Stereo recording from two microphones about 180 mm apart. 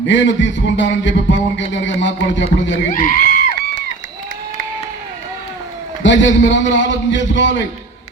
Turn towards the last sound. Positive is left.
turn(degrees=90)